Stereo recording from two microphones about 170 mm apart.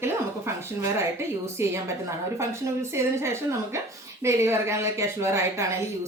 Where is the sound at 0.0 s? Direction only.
15° right (ahead or behind).